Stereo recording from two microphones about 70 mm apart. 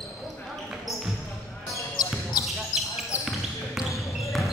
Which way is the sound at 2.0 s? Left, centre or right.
Left.